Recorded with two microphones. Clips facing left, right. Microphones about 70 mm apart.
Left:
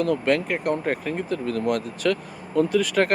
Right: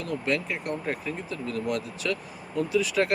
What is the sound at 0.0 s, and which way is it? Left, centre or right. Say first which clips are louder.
Speech: left 7 dB; left.